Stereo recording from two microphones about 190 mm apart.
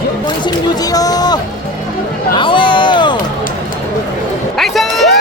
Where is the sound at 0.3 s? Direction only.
20° left (ahead or behind).